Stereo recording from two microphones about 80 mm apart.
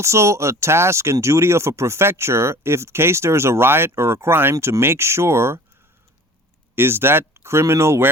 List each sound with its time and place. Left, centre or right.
0.0 s speech: right
4.5 s speech: right
4.8 s speech: right
6.7 s speech: right